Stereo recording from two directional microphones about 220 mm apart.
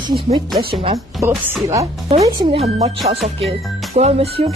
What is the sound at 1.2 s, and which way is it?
Speech, 10° right (ahead or behind).